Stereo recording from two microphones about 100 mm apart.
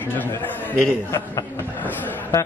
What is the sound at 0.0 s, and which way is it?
A man's voice, 20° left (ahead or behind).